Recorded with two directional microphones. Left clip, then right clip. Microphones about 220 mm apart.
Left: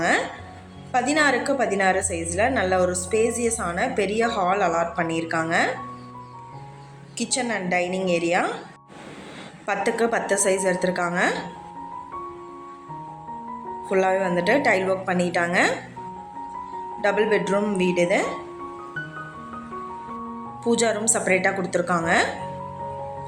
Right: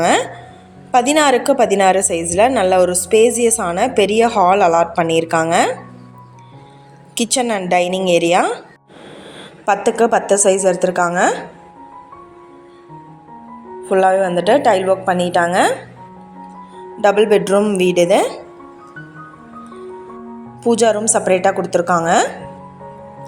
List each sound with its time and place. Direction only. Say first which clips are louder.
0.0 s a woman's voice: right 7 dB; 40° right (ahead or behind)
7.2 s a woman's voice: right 8 dB; 40° right (ahead or behind)
9.6 s a woman's voice: right 9 dB; 25° right (ahead or behind)
13.8 s a woman's voice: right 8 dB; 20° right (ahead or behind)
17.0 s a woman's voice: right 9 dB; 35° right (ahead or behind)
20.7 s a woman's voice: right 8 dB; 25° right (ahead or behind)